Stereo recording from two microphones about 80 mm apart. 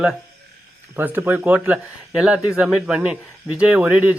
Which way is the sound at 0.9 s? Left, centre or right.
Right.